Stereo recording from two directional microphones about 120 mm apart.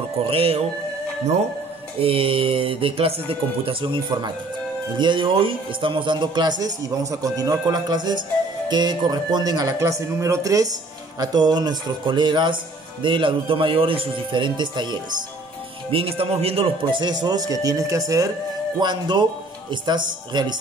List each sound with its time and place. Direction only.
0.3 s speech: 55° right (ahead or behind)
2.0 s speech: 50° right (ahead or behind)
15.9 s speech: 50° right (ahead or behind)
17.0 s speech: 35° right (ahead or behind)